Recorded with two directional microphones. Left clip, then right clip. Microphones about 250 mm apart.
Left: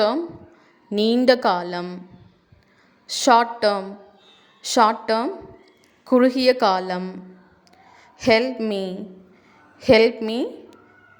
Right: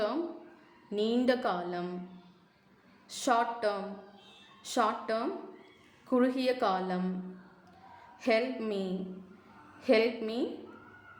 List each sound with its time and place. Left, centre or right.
0.9 s a woman's voice: left
3.1 s a woman's voice: left
8.2 s a woman's voice: left